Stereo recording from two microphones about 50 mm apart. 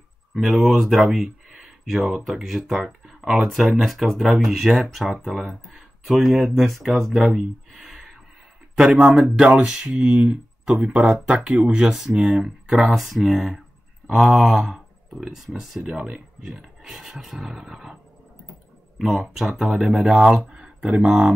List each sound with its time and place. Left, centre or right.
0.3 s speech: centre
8.7 s speech: centre
18.9 s speech: centre